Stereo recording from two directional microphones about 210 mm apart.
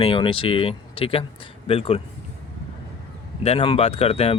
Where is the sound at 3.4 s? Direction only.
25° left (ahead or behind).